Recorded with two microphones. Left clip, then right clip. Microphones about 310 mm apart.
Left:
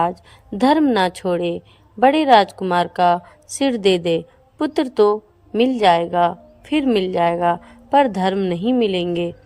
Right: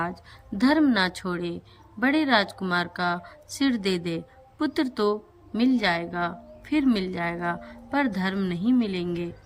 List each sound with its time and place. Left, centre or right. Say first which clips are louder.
0.6 s a woman's voice: left 6 dB; centre
6.0 s a woman's voice: left 12 dB; left
6.2 s speech: left 11 dB; centre
7.3 s a woman's voice: left 12 dB; left
7.6 s a woman's voice: left 11 dB; centre
8.7 s a woman's voice: left 8 dB; left